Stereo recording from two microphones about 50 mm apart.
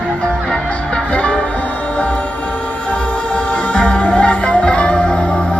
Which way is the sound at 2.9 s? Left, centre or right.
Left.